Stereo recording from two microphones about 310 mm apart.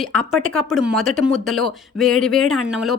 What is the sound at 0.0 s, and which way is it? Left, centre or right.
Speech, centre.